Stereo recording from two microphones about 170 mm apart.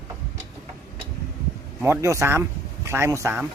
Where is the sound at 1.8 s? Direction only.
15° right (ahead or behind).